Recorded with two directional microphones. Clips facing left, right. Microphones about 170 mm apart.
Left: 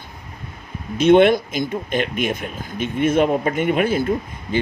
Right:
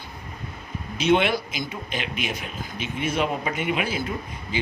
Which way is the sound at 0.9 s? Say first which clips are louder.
Left 8 dB; 50° left (ahead or behind).